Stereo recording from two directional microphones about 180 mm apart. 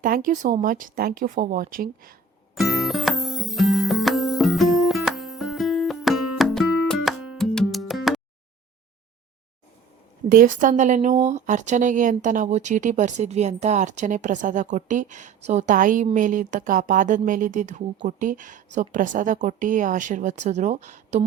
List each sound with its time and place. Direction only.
0.0 s speech: 50° right (ahead or behind)
2.6 s music: centre (ahead or behind)
10.2 s speech: 50° right (ahead or behind)